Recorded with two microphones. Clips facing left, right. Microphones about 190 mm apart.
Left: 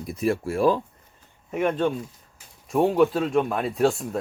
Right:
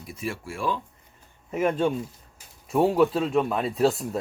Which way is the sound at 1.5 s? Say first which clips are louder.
Even; centre (ahead or behind).